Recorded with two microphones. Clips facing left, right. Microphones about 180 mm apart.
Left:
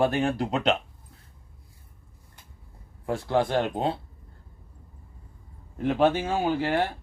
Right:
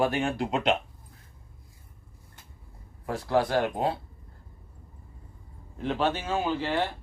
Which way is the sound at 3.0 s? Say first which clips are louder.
Left 1 dB; 25° left (ahead or behind).